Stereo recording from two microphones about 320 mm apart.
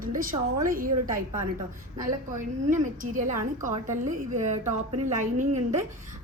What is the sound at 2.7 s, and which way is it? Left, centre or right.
A woman's voice, right.